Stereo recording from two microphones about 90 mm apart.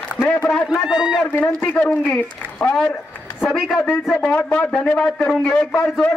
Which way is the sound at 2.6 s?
5° left (ahead or behind).